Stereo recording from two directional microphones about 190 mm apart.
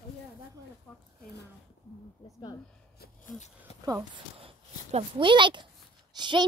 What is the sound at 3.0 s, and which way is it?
Speech, 40° left (ahead or behind).